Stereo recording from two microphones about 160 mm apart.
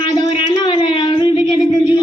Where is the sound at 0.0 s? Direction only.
30° left (ahead or behind).